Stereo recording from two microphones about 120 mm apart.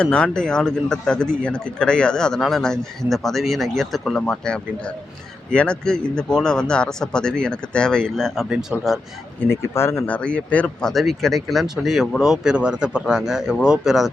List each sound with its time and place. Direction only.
0.0 s speech: 10° left (ahead or behind)
9.5 s speech: 20° left (ahead or behind)
10.2 s speech: 10° left (ahead or behind)